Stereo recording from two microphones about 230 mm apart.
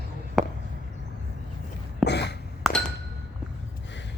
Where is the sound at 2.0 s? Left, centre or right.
Left.